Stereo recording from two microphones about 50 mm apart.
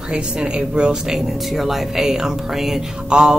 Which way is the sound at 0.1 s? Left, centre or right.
Centre.